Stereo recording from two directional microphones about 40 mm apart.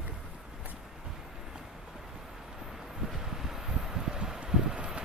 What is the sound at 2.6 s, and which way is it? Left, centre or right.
Vehicle, centre.